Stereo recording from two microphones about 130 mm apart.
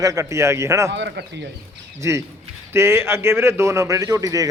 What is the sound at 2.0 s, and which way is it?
A man's voice, 20° right (ahead or behind).